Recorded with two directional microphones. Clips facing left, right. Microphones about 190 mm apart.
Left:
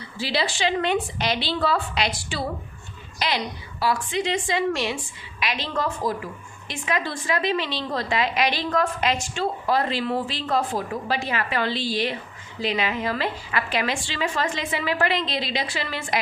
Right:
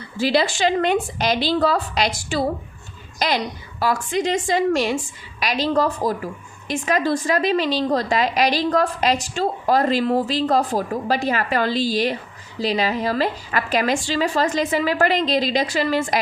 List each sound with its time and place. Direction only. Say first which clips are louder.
0.2 s a woman's voice: right 6 dB; 50° right (ahead or behind)